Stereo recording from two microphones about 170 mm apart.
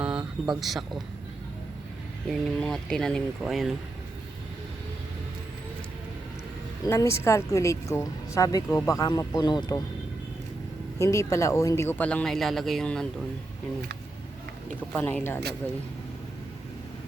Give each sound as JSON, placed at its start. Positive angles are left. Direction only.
{"t": 0.0, "sound": "a sound", "side_deg": -5}
{"t": 0.6, "sound": "speech", "side_deg": 0}
{"t": 2.3, "sound": "speech", "side_deg": 0}
{"t": 6.8, "sound": "speech", "side_deg": 15}
{"t": 10.9, "sound": "speech", "side_deg": 15}
{"t": 14.8, "sound": "speech", "side_deg": 10}